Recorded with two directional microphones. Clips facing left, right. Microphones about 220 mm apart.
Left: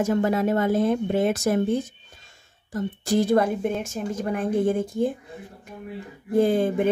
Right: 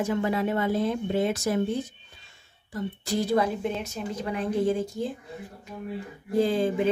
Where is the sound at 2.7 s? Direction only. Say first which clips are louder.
Left 5 dB; 50° left (ahead or behind).